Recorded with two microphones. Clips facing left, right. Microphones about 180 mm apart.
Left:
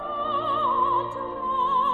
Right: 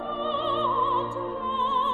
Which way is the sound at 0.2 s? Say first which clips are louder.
Right 1 dB; 25° right (ahead or behind).